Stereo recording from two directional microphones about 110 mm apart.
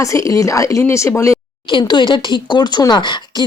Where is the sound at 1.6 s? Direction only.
45° left (ahead or behind).